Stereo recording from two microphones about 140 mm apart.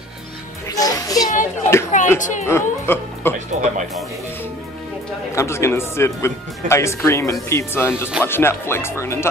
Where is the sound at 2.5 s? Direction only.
15° left (ahead or behind).